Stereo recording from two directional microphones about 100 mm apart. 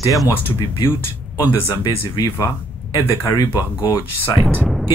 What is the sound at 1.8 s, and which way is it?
Speech, 40° left (ahead or behind).